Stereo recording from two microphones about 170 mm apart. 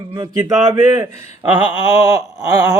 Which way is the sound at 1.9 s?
20° right (ahead or behind).